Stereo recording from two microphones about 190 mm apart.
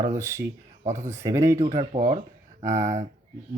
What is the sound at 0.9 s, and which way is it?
Speech, 40° right (ahead or behind).